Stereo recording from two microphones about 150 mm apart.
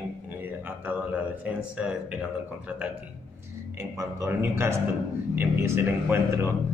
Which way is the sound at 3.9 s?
20° right (ahead or behind).